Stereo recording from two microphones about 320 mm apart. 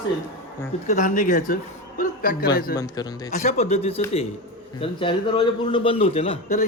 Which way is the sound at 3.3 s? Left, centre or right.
Left.